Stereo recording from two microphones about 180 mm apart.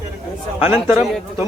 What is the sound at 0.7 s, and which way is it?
Speech, 15° right (ahead or behind).